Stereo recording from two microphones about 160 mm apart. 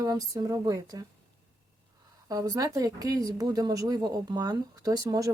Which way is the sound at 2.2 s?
20° right (ahead or behind).